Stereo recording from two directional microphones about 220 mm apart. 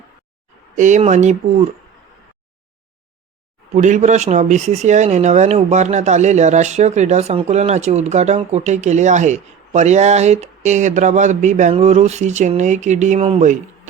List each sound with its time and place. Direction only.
0.8 s speech: 35° right (ahead or behind)
3.8 s speech: 35° right (ahead or behind)